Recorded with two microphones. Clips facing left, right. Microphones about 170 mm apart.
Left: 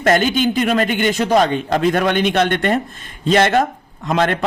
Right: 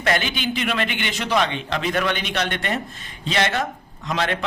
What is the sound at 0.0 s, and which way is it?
A man's voice, 45° left (ahead or behind).